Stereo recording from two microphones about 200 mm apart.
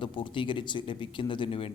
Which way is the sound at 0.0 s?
25° left (ahead or behind).